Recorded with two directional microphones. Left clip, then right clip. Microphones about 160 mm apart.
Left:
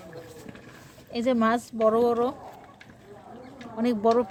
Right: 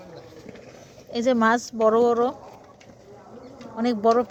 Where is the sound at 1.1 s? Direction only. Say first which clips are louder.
Right 4 dB; 15° right (ahead or behind).